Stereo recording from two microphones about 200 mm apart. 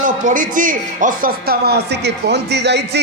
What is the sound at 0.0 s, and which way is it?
Speech, 40° right (ahead or behind).